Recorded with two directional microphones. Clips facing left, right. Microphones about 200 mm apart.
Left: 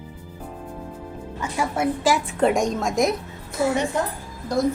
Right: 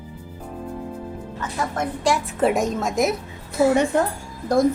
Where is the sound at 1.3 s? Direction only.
10° left (ahead or behind).